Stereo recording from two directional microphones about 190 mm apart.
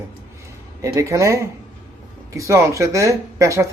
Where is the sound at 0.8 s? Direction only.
15° right (ahead or behind).